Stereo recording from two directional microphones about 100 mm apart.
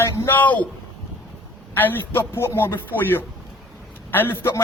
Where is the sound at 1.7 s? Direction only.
20° left (ahead or behind).